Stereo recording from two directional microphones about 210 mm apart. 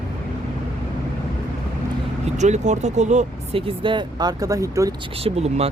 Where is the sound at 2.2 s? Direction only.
35° right (ahead or behind); by 4.9 s 15° right (ahead or behind).